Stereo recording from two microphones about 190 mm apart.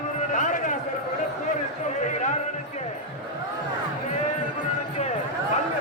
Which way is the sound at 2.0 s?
40° left (ahead or behind).